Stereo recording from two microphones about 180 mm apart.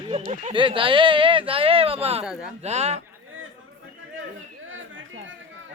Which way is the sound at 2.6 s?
35° right (ahead or behind).